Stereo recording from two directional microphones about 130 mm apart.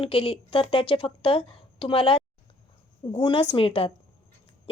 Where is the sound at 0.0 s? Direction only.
45° left (ahead or behind).